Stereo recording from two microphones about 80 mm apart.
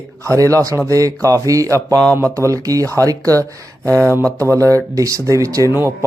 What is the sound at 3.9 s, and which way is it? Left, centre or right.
Speech, right.